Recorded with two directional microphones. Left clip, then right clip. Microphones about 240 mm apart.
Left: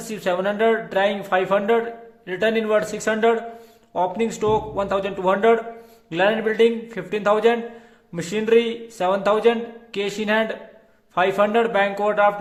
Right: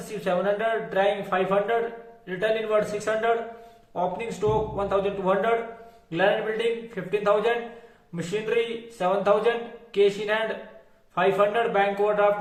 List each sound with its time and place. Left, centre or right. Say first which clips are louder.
0.3 s speech: left 5 dB; left